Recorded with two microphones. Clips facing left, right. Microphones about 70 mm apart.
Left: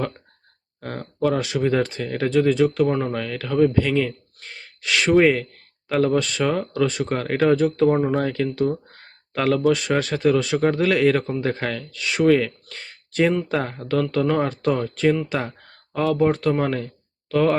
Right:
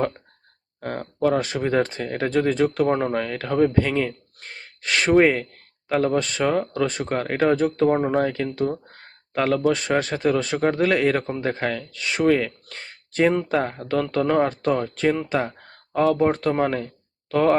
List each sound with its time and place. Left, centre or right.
0.8 s speech: right
7.1 s speech: centre
7.5 s speech: right
7.9 s speech: centre
11.9 s speech: right
14.3 s speech: centre
15.7 s a sound: right
16.3 s speech: right